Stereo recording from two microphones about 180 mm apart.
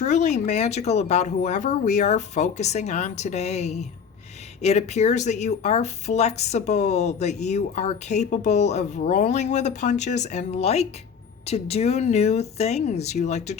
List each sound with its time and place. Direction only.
0.0 s speech: 40° left (ahead or behind)